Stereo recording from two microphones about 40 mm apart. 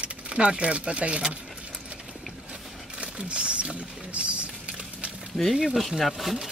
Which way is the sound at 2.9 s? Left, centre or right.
Right.